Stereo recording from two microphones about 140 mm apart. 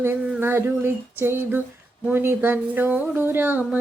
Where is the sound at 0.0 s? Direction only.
15° right (ahead or behind).